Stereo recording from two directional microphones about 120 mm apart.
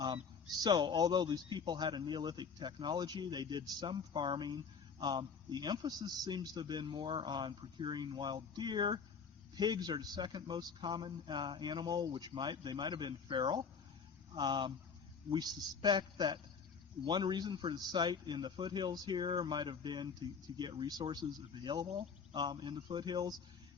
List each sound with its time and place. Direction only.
0.6 s a man's voice: 40° right (ahead or behind)